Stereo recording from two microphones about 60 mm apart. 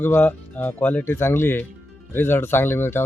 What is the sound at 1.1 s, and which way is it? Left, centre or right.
Speech, left.